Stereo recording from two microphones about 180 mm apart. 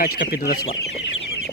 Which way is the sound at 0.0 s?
50° left (ahead or behind).